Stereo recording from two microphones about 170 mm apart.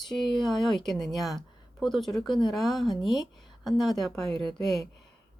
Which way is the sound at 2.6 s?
Centre (ahead or behind).